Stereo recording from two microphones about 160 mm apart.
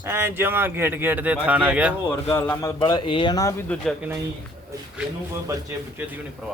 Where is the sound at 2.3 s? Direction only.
20° left (ahead or behind).